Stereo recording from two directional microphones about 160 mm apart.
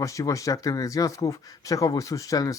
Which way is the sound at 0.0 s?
20° left (ahead or behind).